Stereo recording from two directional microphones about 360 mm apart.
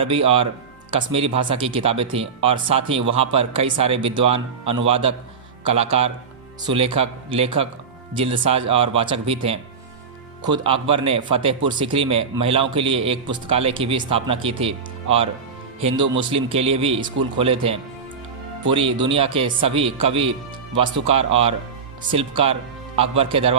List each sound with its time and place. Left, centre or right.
0.0 s a man's voice: centre